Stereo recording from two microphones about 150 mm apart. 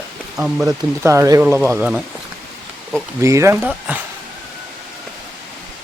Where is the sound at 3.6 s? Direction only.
10° right (ahead or behind).